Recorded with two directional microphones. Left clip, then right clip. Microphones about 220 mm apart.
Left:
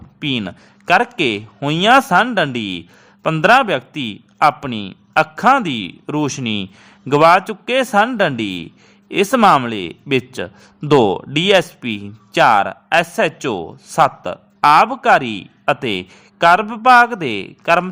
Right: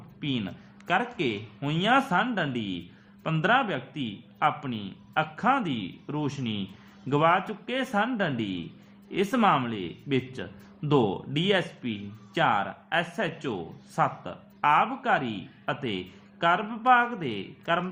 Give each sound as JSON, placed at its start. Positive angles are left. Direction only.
{"t": 0.2, "sound": "a man's voice", "side_deg": 45}